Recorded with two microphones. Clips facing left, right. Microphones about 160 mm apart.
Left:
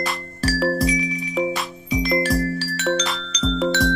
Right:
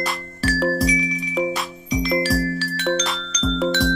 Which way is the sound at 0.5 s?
Centre (ahead or behind).